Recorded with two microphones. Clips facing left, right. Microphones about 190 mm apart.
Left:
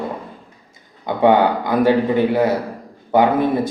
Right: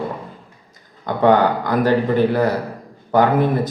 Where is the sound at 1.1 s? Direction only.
15° left (ahead or behind).